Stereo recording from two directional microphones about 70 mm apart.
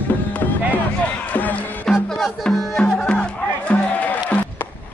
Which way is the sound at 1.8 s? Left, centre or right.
Centre.